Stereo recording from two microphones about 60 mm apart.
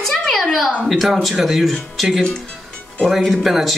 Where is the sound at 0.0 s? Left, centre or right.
Centre.